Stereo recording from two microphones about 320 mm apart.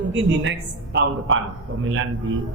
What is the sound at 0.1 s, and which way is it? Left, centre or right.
Speech, right.